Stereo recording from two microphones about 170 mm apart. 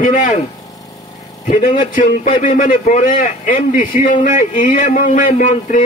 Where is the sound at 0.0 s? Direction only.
50° left (ahead or behind).